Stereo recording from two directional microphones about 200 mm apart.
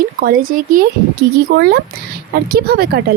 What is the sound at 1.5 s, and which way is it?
Speech, 55° right (ahead or behind).